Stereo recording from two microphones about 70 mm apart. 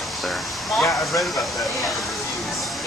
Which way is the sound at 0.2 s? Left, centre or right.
Centre.